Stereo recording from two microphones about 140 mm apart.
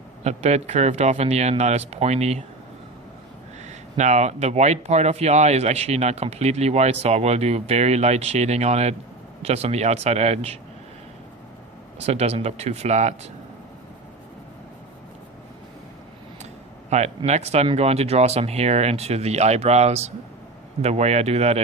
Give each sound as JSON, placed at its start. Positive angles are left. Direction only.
{"t": 0.3, "sound": "speech", "side_deg": -50}
{"t": 3.6, "sound": "speech", "side_deg": -55}
{"t": 11.9, "sound": "speech", "side_deg": -50}
{"t": 16.9, "sound": "speech", "side_deg": -55}